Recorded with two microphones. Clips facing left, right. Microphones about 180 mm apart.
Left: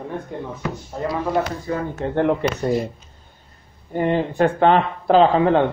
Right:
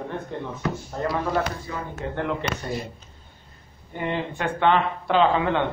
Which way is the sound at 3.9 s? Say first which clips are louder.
Left 8 dB; 40° left (ahead or behind).